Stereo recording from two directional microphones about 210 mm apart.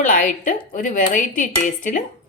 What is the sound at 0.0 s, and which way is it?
A woman's voice, 40° left (ahead or behind).